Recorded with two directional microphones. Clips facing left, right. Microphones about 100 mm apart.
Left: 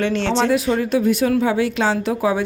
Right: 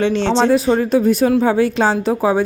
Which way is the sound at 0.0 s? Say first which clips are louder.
Right 4 dB; 25° right (ahead or behind).